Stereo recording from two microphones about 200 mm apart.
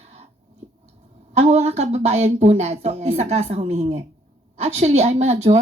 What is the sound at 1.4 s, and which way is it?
Speech, 35° right (ahead or behind).